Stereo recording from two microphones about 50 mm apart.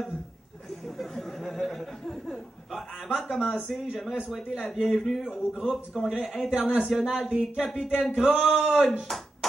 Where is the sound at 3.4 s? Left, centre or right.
Left.